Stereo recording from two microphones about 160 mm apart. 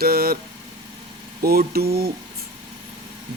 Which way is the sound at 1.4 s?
70° right (ahead or behind).